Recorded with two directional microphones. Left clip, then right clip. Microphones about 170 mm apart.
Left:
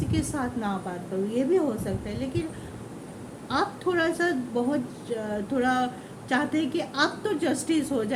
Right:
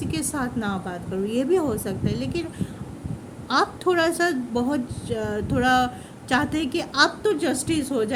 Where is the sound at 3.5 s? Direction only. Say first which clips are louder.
Right 5 dB; 55° right (ahead or behind).